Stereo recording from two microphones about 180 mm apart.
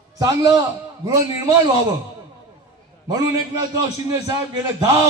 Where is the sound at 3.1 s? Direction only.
20° right (ahead or behind).